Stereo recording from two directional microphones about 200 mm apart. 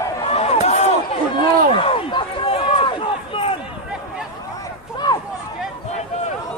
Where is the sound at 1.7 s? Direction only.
25° left (ahead or behind).